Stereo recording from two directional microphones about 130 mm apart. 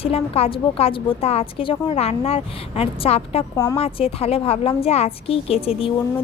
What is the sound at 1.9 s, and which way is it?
A woman's voice, 50° left (ahead or behind).